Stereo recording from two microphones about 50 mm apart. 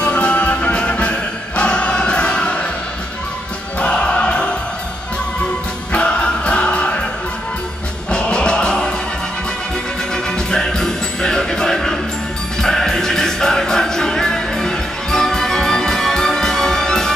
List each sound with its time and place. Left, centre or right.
0.0 s music: left
3.8 s music: centre
5.9 s music: left
8.1 s music: centre
10.1 s music: centre